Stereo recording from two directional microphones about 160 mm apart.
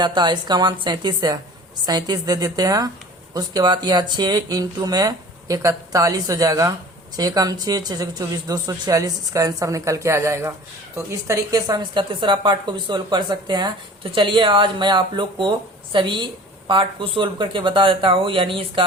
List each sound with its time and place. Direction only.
0.0 s a woman's voice: 25° right (ahead or behind)